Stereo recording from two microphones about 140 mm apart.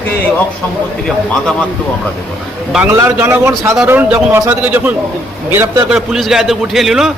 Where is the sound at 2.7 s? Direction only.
10° right (ahead or behind).